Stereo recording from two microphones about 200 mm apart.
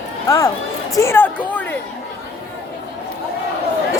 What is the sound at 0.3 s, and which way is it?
A woman's voice, 15° left (ahead or behind).